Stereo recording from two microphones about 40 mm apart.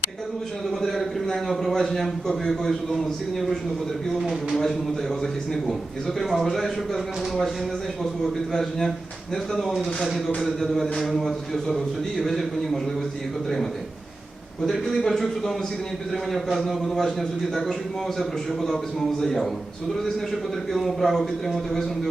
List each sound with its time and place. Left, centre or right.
0.7 s a sound: centre
2.5 s a man's voice: centre
9.3 s a man's voice: centre
14.6 s a man's voice: centre